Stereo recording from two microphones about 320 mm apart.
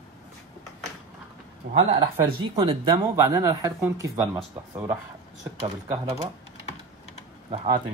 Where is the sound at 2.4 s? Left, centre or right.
Centre.